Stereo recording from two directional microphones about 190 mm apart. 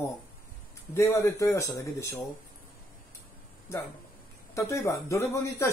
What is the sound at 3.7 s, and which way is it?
A man's voice, 15° left (ahead or behind).